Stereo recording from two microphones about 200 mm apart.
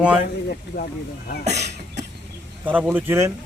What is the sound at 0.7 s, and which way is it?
Speech, 50° left (ahead or behind).